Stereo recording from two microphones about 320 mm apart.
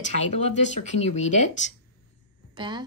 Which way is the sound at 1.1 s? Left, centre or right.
Left.